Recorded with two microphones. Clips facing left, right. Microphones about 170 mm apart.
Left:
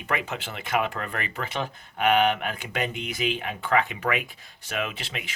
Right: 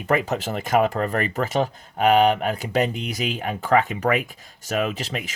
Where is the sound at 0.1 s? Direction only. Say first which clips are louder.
Right 8 dB; 40° right (ahead or behind).